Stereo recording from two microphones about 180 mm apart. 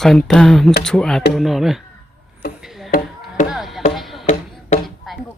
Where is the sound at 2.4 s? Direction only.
60° left (ahead or behind).